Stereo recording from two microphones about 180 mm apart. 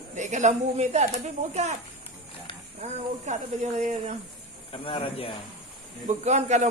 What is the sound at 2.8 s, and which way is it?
A man's voice, 40° right (ahead or behind).